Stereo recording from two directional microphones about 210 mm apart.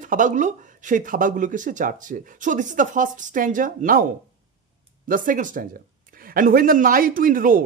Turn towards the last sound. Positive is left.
turn(degrees=-40)  # may be behind; listen again after turning